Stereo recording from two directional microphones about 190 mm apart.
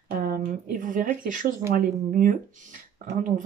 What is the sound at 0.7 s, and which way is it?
Speech, 45° right (ahead or behind).